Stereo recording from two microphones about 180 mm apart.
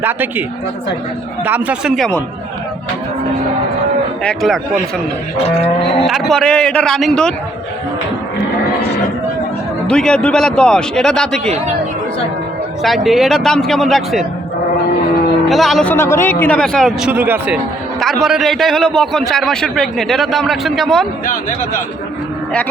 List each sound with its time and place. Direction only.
0.0 s speech: 10° right (ahead or behind)
1.5 s speech: 10° right (ahead or behind)
4.2 s a man's voice: 5° left (ahead or behind)
5.4 s livestock: 35° left (ahead or behind)
6.1 s a man's voice: centre (ahead or behind)
9.8 s a man's voice: 5° left (ahead or behind)
12.8 s a man's voice: centre (ahead or behind)
15.4 s a man's voice: centre (ahead or behind)